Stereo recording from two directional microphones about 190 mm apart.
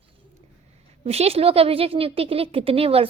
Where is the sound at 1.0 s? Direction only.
30° right (ahead or behind).